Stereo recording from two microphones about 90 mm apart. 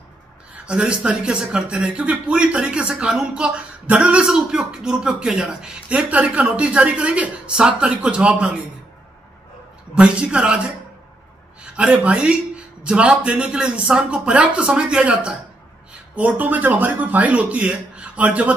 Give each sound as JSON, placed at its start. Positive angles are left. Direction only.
{"t": 0.7, "sound": "speech", "side_deg": -10}
{"t": 9.9, "sound": "speech", "side_deg": -10}